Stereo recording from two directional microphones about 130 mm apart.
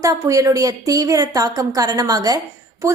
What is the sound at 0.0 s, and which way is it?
A woman's voice, 25° right (ahead or behind).